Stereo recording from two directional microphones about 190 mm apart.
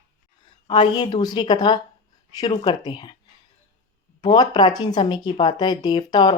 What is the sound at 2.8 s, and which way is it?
Speech, 25° left (ahead or behind).